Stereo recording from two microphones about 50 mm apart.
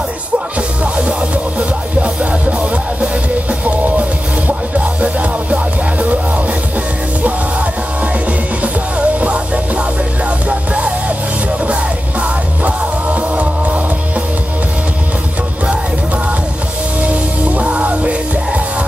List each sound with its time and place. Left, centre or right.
3.6 s music: right
8.9 s music: right
17.0 s music: right